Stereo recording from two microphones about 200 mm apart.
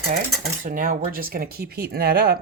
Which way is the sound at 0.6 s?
45° right (ahead or behind).